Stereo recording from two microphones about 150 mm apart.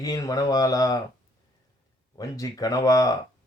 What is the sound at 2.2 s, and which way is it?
A man's voice, 25° left (ahead or behind).